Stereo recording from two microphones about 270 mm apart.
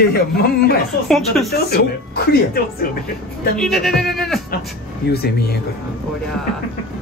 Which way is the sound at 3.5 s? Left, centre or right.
Centre.